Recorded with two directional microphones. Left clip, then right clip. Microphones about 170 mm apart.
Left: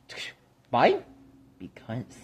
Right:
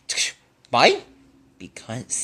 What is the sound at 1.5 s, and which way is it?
Speech, 30° right (ahead or behind).